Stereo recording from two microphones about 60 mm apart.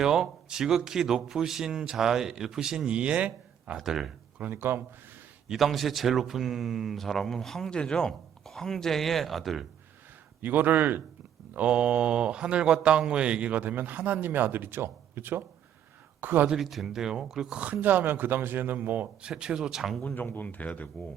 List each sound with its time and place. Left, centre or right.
0.0 s a man's voice: centre
3.8 s a man's voice: centre
4.5 s a man's voice: right
5.5 s a man's voice: centre
10.4 s a man's voice: right
11.5 s a man's voice: centre
16.5 s a man's voice: centre
17.6 s a man's voice: right
19.4 s a man's voice: centre
20.1 s speech: left